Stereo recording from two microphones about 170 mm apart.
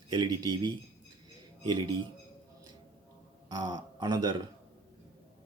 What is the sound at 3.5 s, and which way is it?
Speech, 25° right (ahead or behind).